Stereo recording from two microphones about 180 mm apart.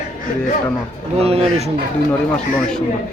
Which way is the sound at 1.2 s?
35° right (ahead or behind).